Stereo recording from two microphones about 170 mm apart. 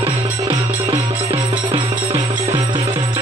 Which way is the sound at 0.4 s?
25° right (ahead or behind).